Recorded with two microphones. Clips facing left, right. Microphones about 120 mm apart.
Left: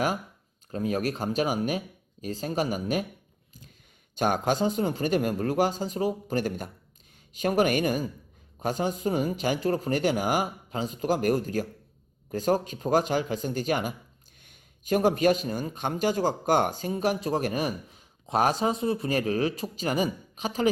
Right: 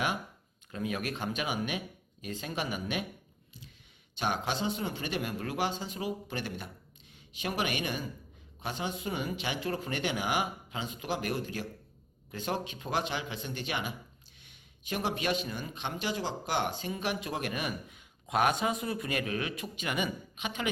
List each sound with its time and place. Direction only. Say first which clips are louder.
0.7 s a man's voice: left 7 dB; 40° left (ahead or behind)
4.1 s a man's voice: left 7 dB; 45° left (ahead or behind)